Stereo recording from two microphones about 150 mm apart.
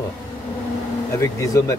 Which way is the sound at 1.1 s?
20° left (ahead or behind).